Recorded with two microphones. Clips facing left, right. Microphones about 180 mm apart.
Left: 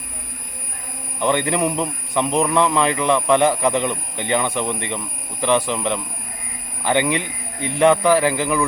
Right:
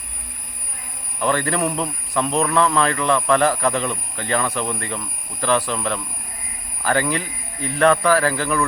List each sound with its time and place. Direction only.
1.2 s a man's voice: 20° left (ahead or behind)